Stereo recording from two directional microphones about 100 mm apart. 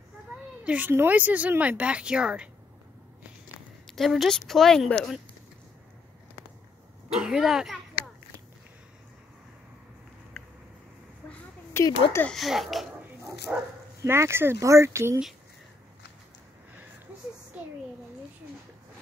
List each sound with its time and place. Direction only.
0.7 s speech: 15° right (ahead or behind)
3.8 s a woman's voice: centre (ahead or behind)
7.1 s a woman's voice: 5° right (ahead or behind)
10.4 s a sound: 5° left (ahead or behind)
11.2 s a sound: 15° left (ahead or behind)
11.7 s speech: 25° left (ahead or behind)
12.3 s a woman's voice: centre (ahead or behind)
14.0 s speech: 25° right (ahead or behind)